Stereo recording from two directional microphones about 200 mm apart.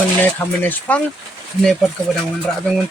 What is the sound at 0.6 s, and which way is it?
Speech, 10° left (ahead or behind).